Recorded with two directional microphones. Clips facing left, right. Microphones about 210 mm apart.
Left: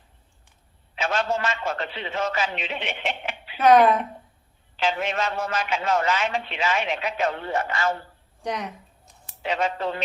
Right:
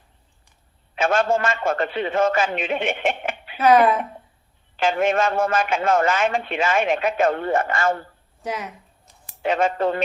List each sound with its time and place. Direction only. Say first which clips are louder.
0.9 s a man's voice: right 6 dB; 50° right (ahead or behind)
3.6 s speech: even; centre (ahead or behind)
4.8 s a man's voice: right 6 dB; 50° right (ahead or behind)
8.4 s a sound: even; 5° right (ahead or behind)
9.4 s a man's voice: right 5 dB; 50° right (ahead or behind)